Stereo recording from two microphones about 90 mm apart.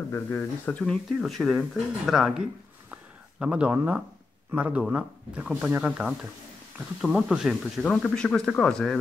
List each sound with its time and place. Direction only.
0.1 s speech: 25° left (ahead or behind)
1.2 s speech: centre (ahead or behind)
2.9 s a sound: 10° right (ahead or behind)
3.7 s speech: 15° right (ahead or behind)
7.8 s speech: 10° left (ahead or behind)